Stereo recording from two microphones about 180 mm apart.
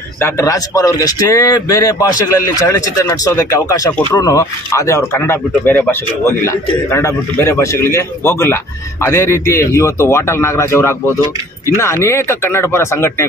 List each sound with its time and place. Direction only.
0.2 s a man's voice: 15° left (ahead or behind)